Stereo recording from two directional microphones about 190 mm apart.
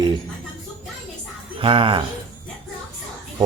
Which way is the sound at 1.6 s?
30° right (ahead or behind).